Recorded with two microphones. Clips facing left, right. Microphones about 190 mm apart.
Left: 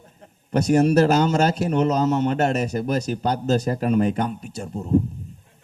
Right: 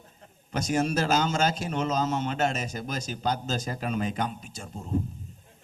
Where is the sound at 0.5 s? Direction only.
65° left (ahead or behind).